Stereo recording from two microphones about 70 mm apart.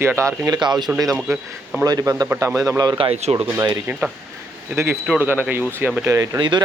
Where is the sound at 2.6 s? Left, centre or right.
Right.